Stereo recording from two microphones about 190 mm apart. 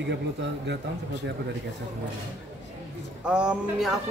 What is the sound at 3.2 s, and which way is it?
Speech, 5° right (ahead or behind).